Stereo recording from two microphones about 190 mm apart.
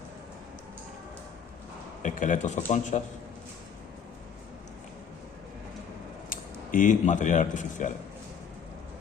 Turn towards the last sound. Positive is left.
turn(degrees=40)  # may be behind; listen again after turning